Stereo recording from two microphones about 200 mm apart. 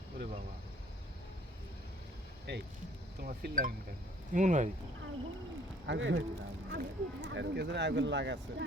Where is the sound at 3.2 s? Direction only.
45° right (ahead or behind).